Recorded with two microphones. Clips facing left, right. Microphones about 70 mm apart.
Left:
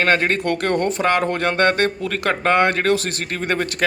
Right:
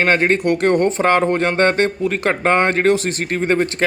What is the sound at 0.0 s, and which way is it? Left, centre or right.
A man's voice, right.